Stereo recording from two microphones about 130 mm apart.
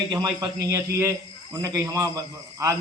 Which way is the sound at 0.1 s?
30° right (ahead or behind).